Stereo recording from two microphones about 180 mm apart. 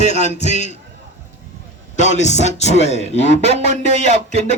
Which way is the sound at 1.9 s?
40° left (ahead or behind).